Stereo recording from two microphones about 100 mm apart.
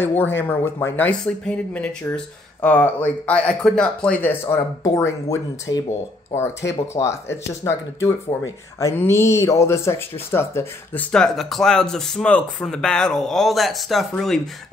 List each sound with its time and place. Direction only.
0.0 s speech: 20° left (ahead or behind)
4.8 s speech: 35° left (ahead or behind)
7.0 s speech: 40° left (ahead or behind)
7.6 s speech: 30° left (ahead or behind)
11.1 s speech: 5° left (ahead or behind)